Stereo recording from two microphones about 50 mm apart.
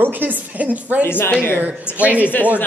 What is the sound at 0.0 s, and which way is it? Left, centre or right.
A woman's voice, right.